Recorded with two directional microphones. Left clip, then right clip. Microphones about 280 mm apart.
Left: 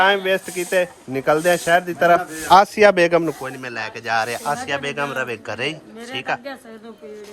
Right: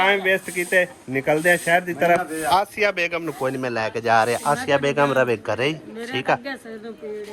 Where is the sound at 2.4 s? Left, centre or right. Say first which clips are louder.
Left 9 dB; left.